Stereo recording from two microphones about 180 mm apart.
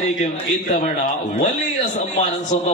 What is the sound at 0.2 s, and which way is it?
A man's voice, 45° left (ahead or behind).